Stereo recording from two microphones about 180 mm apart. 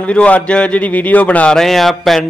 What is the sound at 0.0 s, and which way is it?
A man's voice, 5° left (ahead or behind).